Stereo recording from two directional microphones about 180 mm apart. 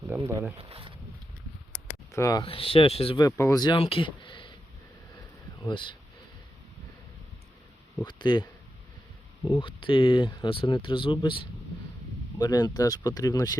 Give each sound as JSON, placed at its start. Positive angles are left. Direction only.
{"t": 0.3, "sound": "speech", "side_deg": -15}
{"t": 0.6, "sound": "speech", "side_deg": -30}
{"t": 2.1, "sound": "speech", "side_deg": 20}
{"t": 3.2, "sound": "speech", "side_deg": 20}
{"t": 5.6, "sound": "speech", "side_deg": 25}
{"t": 8.0, "sound": "speech", "side_deg": 25}
{"t": 12.4, "sound": "speech", "side_deg": 20}